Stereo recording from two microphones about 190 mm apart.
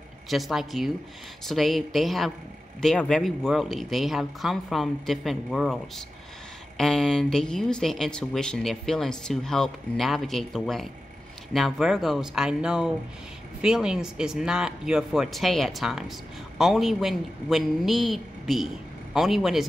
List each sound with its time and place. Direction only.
0.3 s speech: centre (ahead or behind)